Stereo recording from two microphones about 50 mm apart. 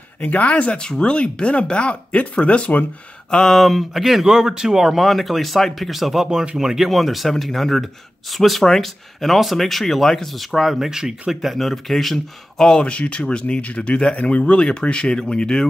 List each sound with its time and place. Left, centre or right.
0.2 s speech: left
3.3 s speech: centre
5.0 s speech: centre
6.9 s speech: centre
11.5 s speech: centre
12.8 s speech: left